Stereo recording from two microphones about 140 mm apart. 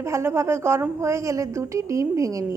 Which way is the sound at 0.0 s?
20° right (ahead or behind).